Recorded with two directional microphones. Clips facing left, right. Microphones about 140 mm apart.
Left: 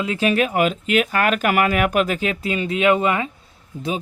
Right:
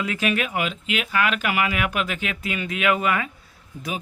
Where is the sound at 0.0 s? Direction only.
30° left (ahead or behind).